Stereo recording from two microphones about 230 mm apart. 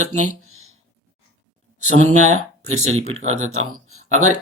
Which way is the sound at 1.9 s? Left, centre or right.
Right.